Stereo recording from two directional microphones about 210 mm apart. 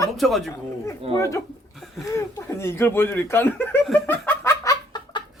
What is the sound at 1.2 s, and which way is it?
Speech, 15° left (ahead or behind).